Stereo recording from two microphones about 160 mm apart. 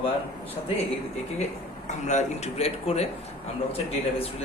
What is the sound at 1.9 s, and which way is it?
A man's voice, 50° left (ahead or behind).